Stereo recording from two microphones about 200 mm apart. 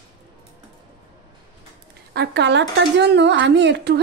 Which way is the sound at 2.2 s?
60° right (ahead or behind).